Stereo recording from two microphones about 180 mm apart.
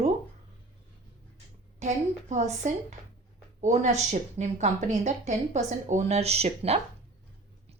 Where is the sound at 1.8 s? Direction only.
40° right (ahead or behind).